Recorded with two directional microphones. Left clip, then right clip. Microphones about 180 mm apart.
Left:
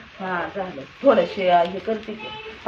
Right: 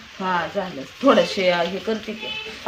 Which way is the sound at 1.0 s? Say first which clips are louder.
Right 1 dB; 60° right (ahead or behind).